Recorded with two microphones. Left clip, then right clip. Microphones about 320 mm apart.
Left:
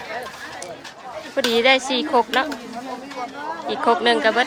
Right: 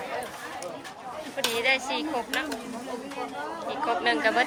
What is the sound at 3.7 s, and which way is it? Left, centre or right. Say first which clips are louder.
Speech: left 8 dB; centre.